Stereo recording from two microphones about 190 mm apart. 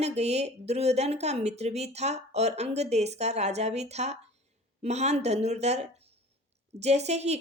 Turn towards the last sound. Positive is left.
turn(degrees=-35)  # may be behind; listen again after turning